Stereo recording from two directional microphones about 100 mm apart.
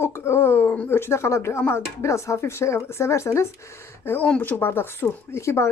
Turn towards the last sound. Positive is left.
turn(degrees=30)  # may be behind; listen again after turning